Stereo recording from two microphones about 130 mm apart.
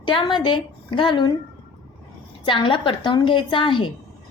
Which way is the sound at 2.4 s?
40° left (ahead or behind).